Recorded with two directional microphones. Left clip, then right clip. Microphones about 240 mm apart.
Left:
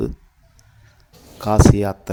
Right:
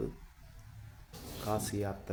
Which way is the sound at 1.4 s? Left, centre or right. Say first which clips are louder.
Left 19 dB; left.